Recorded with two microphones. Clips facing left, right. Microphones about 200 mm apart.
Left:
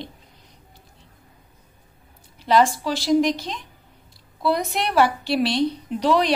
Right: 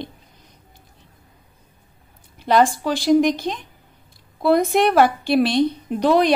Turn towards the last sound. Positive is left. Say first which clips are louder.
# right 3 dB
turn(degrees=-50)  # may be behind; listen again after turning